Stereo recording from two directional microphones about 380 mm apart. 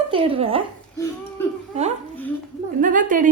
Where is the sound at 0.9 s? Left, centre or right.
Centre.